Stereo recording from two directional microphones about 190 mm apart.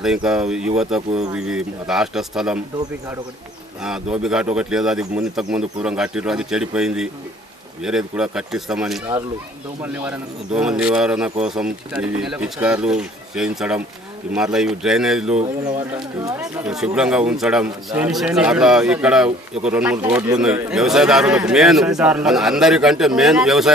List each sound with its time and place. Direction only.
0.0 s speech: 5° right (ahead or behind)
3.8 s speech: 5° right (ahead or behind)
16.6 s speech: 5° right (ahead or behind)